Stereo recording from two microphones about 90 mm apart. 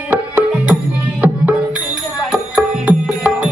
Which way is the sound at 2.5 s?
15° right (ahead or behind).